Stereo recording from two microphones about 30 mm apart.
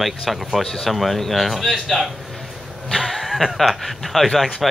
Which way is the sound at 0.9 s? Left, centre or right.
Centre.